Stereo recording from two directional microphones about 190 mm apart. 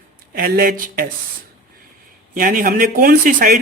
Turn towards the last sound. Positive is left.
turn(degrees=-45)  # may be behind; listen again after turning